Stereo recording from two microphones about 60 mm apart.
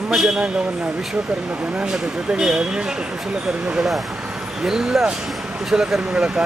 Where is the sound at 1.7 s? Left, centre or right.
Centre.